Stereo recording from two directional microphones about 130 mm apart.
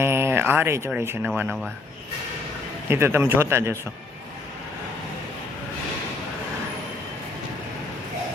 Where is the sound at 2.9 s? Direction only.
20° right (ahead or behind).